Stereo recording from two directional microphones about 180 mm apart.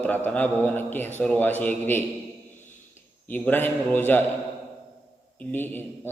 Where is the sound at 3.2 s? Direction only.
10° left (ahead or behind).